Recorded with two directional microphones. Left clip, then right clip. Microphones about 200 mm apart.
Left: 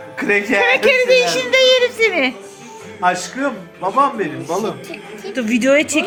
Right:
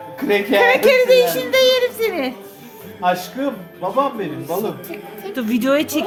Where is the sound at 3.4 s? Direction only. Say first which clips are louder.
Left 2 dB; 5° left (ahead or behind).